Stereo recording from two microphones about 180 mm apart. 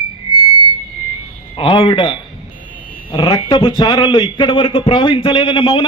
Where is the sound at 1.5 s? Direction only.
30° left (ahead or behind).